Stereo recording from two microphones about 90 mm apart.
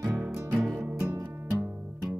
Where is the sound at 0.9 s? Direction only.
30° right (ahead or behind).